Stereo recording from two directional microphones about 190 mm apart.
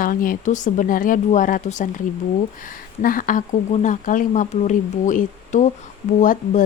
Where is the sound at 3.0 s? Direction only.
45° left (ahead or behind).